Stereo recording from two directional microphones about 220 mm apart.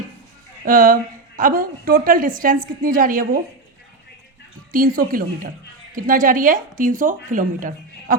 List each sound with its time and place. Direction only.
0.6 s a woman's voice: 40° right (ahead or behind)
4.7 s a woman's voice: 40° right (ahead or behind)